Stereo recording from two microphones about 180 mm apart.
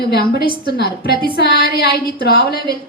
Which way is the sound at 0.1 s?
60° left (ahead or behind).